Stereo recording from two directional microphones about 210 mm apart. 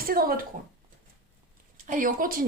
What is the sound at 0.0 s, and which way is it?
Speech, 45° right (ahead or behind).